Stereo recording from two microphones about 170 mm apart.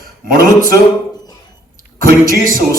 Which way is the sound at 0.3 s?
55° right (ahead or behind).